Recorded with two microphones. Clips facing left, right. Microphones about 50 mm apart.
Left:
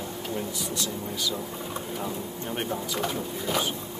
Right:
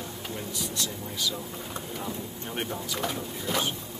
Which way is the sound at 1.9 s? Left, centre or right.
Centre.